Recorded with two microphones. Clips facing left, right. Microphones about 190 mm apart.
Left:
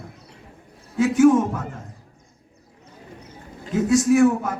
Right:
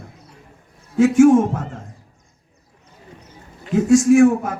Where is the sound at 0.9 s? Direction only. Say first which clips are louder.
Right 4 dB; 50° right (ahead or behind).